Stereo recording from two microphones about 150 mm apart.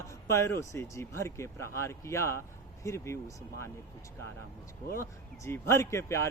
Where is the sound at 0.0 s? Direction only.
20° left (ahead or behind).